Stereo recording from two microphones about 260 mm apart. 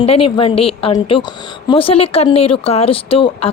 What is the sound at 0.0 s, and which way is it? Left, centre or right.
Speech, left.